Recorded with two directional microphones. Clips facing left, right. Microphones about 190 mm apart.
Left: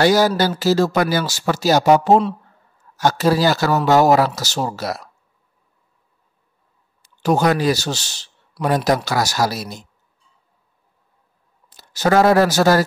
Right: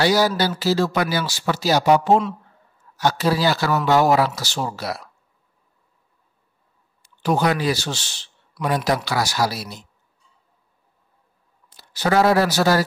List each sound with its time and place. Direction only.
0.0 s speech: 50° left (ahead or behind)
7.0 s a man's voice: 45° left (ahead or behind)
11.7 s speech: 45° left (ahead or behind)